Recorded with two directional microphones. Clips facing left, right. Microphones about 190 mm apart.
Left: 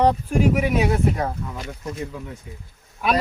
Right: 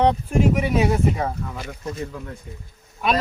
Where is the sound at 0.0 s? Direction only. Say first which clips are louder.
Even; 5° left (ahead or behind).